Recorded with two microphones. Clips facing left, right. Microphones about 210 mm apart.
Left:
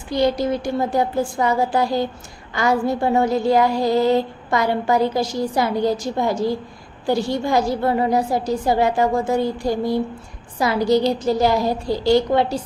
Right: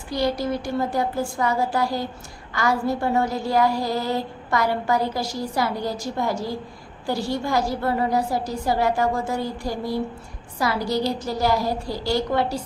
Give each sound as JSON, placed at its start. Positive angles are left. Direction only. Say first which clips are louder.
{"t": 0.1, "sound": "a woman's voice", "louder": "left 4 dB", "side_deg": 20}